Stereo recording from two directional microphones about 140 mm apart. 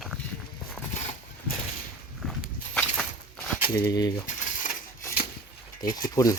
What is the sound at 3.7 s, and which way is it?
Speech, 25° left (ahead or behind).